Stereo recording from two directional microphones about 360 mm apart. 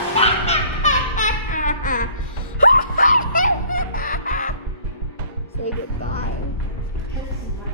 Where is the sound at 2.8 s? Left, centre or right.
Left.